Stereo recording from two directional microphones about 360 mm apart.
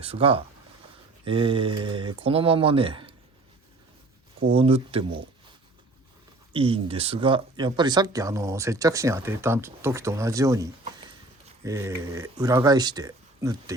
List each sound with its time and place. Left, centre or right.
0.0 s speech: centre
4.4 s speech: centre
6.5 s speech: centre